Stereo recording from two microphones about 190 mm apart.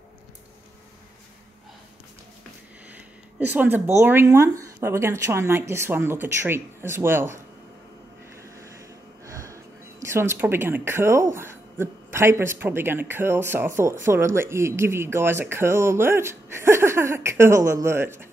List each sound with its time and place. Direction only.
2.9 s speech: 10° right (ahead or behind)
8.7 s a sound: 15° right (ahead or behind)
10.0 s speech: 15° right (ahead or behind)